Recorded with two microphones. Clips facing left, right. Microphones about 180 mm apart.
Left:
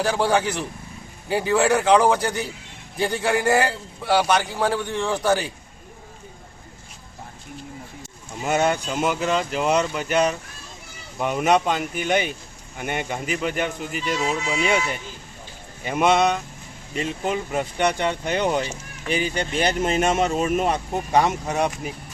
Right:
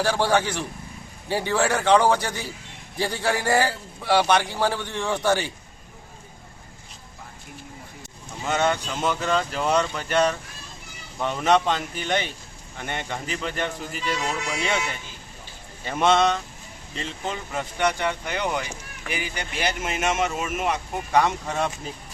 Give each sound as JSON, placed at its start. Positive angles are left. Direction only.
{"t": 0.0, "sound": "a man's voice", "side_deg": 0}
{"t": 8.4, "sound": "a man's voice", "side_deg": 15}
{"t": 15.8, "sound": "speech", "side_deg": 10}
{"t": 20.9, "sound": "speech", "side_deg": 20}